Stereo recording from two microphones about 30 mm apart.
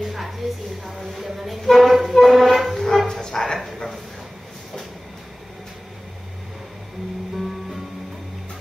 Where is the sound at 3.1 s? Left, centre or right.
Centre.